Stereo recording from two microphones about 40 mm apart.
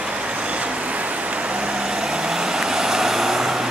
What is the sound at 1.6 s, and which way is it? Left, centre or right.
Vehicle, centre.